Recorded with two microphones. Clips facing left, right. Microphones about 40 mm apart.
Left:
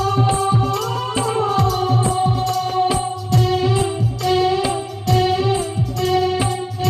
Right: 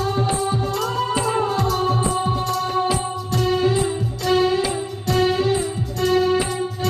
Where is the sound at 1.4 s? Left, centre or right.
Left.